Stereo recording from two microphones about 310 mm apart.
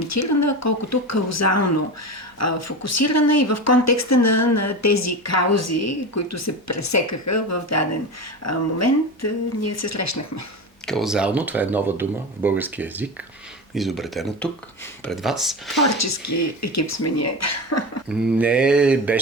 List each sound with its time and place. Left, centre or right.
0.1 s speech: left
10.8 s speech: centre
16.0 s speech: left
18.1 s speech: centre